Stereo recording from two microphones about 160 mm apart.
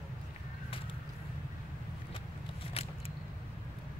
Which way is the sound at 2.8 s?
35° left (ahead or behind).